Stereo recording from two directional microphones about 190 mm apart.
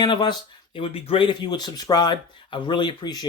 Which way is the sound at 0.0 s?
25° left (ahead or behind).